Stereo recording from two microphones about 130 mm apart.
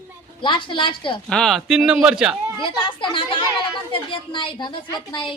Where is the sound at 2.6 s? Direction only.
40° left (ahead or behind).